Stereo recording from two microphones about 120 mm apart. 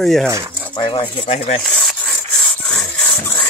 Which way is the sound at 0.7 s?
45° left (ahead or behind).